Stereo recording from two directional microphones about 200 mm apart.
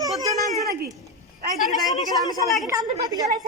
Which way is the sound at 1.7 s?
Centre (ahead or behind).